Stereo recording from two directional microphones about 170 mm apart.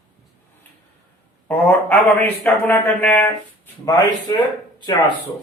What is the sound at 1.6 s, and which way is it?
Speech, 10° left (ahead or behind).